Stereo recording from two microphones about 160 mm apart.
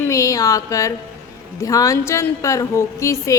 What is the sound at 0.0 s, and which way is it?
A man's voice, 20° left (ahead or behind).